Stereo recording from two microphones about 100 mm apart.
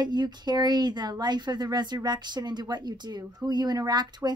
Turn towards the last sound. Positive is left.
turn(degrees=-45)  # may be behind; listen again after turning